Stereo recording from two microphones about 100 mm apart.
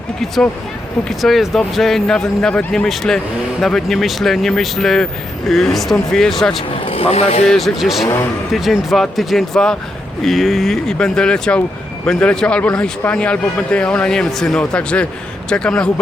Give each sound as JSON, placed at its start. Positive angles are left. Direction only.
{"t": 1.0, "sound": "speech", "side_deg": 0}
{"t": 6.7, "sound": "speech", "side_deg": 70}
{"t": 7.4, "sound": "a man's voice", "side_deg": 5}